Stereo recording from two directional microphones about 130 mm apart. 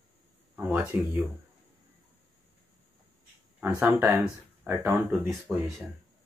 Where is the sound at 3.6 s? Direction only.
15° right (ahead or behind).